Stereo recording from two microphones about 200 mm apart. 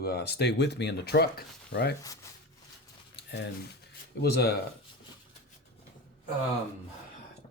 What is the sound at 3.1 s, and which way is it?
Typing, 60° left (ahead or behind).